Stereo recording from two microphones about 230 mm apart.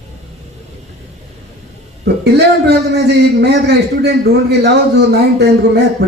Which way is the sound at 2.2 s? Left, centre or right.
Right.